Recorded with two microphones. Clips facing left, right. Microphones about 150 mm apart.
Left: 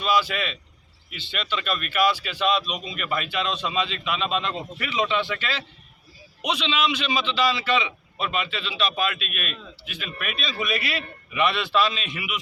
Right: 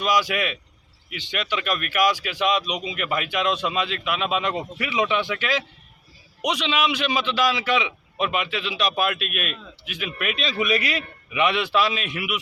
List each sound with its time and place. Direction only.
0.0 s a man's voice: 15° right (ahead or behind)
2.8 s speech: 75° right (ahead or behind)
3.1 s a man's voice: 15° right (ahead or behind)
9.1 s a man's voice: 65° right (ahead or behind)
9.5 s a man's voice: 15° right (ahead or behind)